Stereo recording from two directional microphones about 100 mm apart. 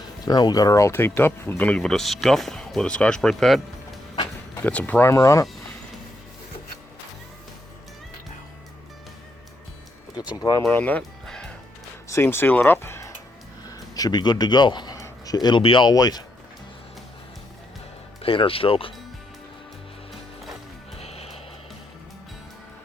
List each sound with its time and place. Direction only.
0.3 s speech: 40° left (ahead or behind); by 4.0 s centre (ahead or behind)
4.6 s speech: 15° left (ahead or behind)
5.0 s speech: 30° left (ahead or behind)
10.3 s speech: 40° left (ahead or behind)
10.7 s music: 15° left (ahead or behind)
12.0 s speech: 25° left (ahead or behind)
13.7 s speech: 40° left (ahead or behind)
15.0 s a sound: 40° left (ahead or behind)
15.6 s speech: 60° left (ahead or behind)
15.9 s speech: 40° left (ahead or behind)
18.2 s speech: 65° left (ahead or behind)
21.0 s music: 90° left